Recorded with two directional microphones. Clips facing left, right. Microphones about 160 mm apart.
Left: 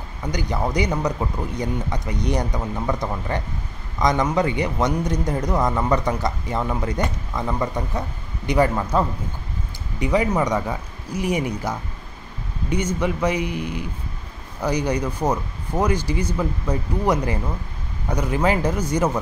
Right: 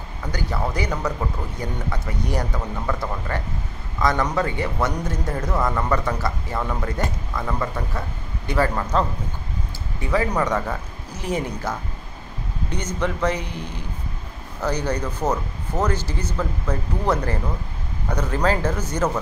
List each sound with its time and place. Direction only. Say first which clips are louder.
0.2 s a man's voice: left 2 dB; 15° left (ahead or behind)